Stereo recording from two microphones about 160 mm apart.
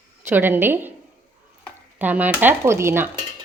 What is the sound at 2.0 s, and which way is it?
A woman's voice, 10° right (ahead or behind).